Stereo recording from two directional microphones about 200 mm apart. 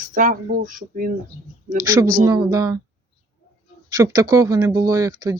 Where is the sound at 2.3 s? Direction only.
20° right (ahead or behind).